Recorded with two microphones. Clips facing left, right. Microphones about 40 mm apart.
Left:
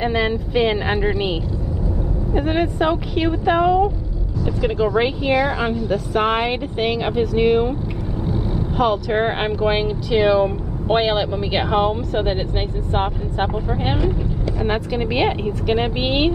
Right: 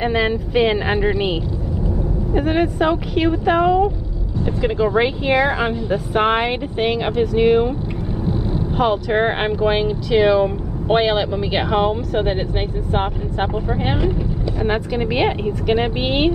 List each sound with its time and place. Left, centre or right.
0.0 s speech: centre
5.2 s a woman's voice: right; by 7.7 s centre
8.7 s speech: centre